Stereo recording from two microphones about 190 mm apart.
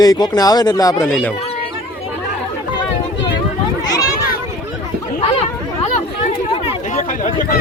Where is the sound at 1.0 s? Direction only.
5° left (ahead or behind).